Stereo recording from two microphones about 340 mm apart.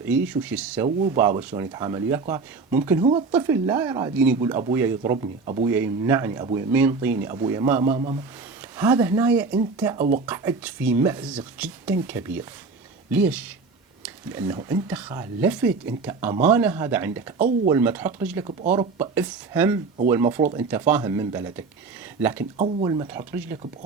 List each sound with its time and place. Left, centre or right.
0.3 s speech: centre
5.7 s speech: centre
22.5 s speech: centre